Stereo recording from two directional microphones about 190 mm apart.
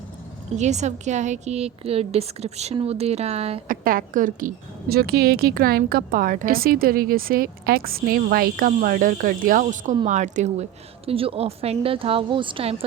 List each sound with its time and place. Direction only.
0.5 s a woman's voice: 35° right (ahead or behind)
3.7 s a woman's voice: 45° right (ahead or behind); by 12.7 s 25° right (ahead or behind)